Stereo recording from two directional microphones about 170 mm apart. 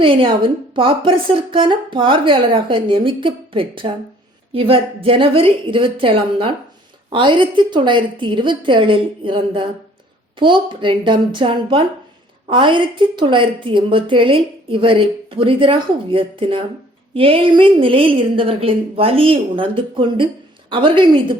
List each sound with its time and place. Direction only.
0.0 s a woman's voice: 30° right (ahead or behind)